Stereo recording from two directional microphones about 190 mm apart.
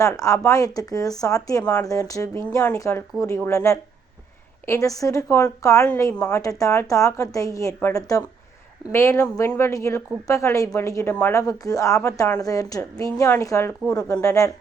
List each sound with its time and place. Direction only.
0.0 s speech: 15° left (ahead or behind)